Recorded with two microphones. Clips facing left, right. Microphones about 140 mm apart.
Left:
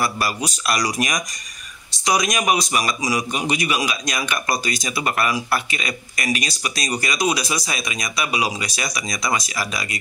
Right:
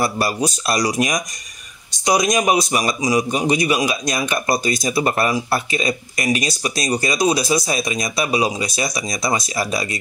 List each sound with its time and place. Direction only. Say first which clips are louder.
0.0 s a man's voice: right 4 dB; 30° right (ahead or behind)